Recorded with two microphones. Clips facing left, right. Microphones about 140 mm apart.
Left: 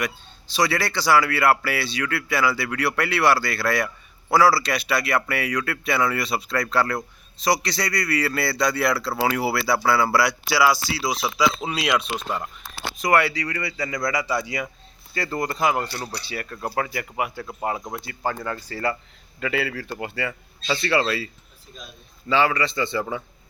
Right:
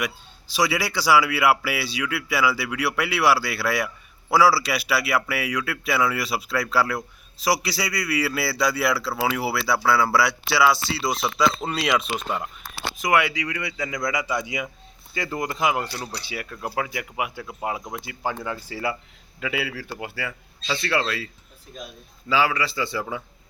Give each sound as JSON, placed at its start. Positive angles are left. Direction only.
{"t": 0.5, "sound": "speech", "side_deg": -10}
{"t": 22.3, "sound": "speech", "side_deg": -5}